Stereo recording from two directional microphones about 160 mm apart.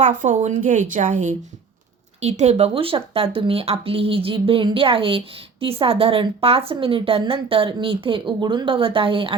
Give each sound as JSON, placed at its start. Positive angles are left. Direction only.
{"t": 0.0, "sound": "speech", "side_deg": -55}